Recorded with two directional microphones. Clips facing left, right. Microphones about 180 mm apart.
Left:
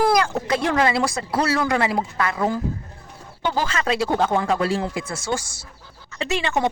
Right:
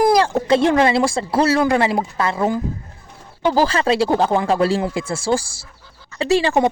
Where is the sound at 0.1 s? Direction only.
30° right (ahead or behind).